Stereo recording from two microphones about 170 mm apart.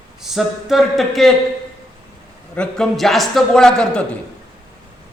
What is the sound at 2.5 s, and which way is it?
A man's voice, 5° left (ahead or behind).